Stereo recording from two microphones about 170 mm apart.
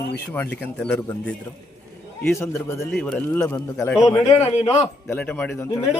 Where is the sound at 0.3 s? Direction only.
10° left (ahead or behind).